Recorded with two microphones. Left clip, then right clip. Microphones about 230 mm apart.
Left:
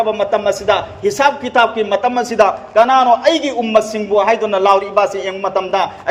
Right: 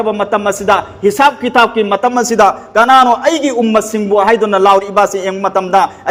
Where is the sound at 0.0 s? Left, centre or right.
Right.